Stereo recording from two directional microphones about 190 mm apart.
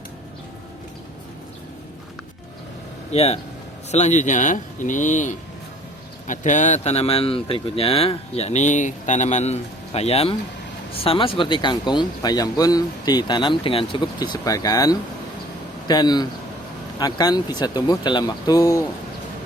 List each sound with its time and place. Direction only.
3.1 s speech: 35° left (ahead or behind); by 18.9 s 15° left (ahead or behind)